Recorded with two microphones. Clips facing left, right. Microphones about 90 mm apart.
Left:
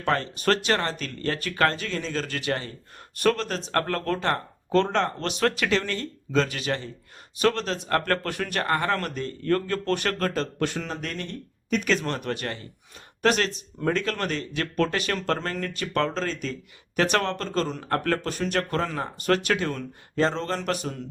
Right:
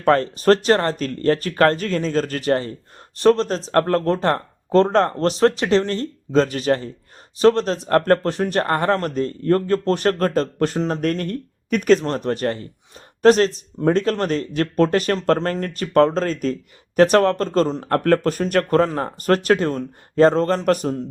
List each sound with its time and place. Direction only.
0.0 s speech: 40° right (ahead or behind)